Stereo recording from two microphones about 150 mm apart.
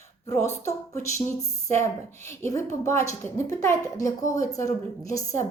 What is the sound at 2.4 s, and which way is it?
A woman's voice, 20° left (ahead or behind).